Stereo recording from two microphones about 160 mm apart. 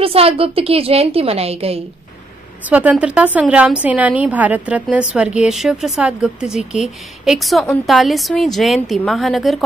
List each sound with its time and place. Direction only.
0.0 s a woman's voice: 35° right (ahead or behind)
2.7 s a woman's voice: 10° right (ahead or behind)